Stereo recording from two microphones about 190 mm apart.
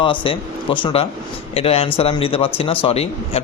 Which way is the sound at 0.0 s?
25° left (ahead or behind).